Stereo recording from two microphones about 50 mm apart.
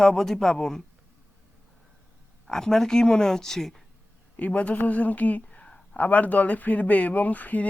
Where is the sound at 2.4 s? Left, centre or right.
Centre.